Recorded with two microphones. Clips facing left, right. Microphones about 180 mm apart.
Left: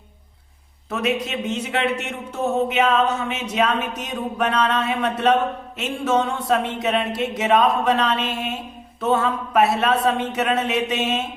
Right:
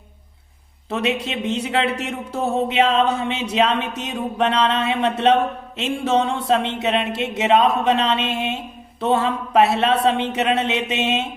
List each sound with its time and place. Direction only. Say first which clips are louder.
0.9 s speech: right 1 dB; 30° right (ahead or behind)